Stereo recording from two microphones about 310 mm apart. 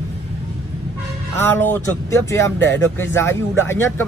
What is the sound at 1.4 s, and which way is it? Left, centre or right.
Speech, centre.